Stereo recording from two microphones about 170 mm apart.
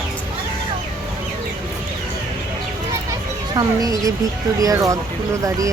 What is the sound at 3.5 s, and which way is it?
Speech, 20° right (ahead or behind).